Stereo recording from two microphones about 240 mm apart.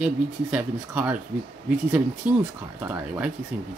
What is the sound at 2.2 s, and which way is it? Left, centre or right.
Speech, centre.